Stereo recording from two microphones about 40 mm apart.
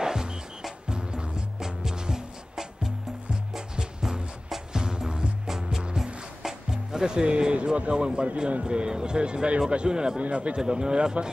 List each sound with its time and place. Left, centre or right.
0.0 s music: centre
6.4 s a man's voice: centre; by 8.6 s right
8.6 s speech: right